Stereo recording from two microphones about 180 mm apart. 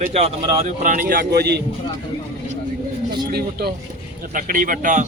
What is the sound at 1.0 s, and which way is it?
Speech, 60° right (ahead or behind).